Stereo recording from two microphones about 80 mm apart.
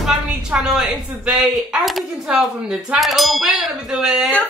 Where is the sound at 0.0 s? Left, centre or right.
Centre.